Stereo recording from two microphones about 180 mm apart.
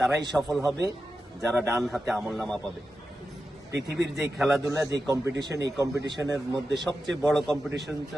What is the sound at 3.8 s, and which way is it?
Speech, 70° right (ahead or behind).